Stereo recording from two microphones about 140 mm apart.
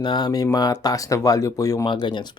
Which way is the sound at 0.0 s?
30° left (ahead or behind).